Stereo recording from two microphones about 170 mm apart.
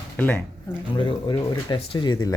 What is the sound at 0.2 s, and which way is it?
Speech, 10° left (ahead or behind).